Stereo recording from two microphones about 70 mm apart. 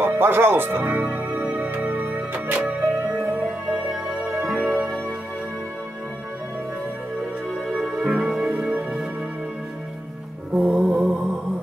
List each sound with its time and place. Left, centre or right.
0.0 s speech: right
0.8 s music: centre
7.6 s music: centre
10.5 s music: centre